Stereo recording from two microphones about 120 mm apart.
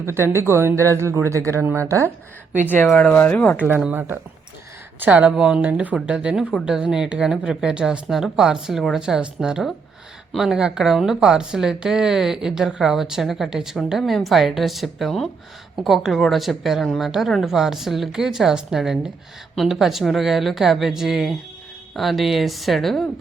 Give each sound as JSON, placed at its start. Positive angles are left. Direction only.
{"t": 0.0, "sound": "speech", "side_deg": -20}
{"t": 2.8, "sound": "speech", "side_deg": 5}
{"t": 3.8, "sound": "speech", "side_deg": -10}